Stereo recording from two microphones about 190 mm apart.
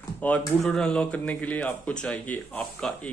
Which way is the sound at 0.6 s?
5° left (ahead or behind).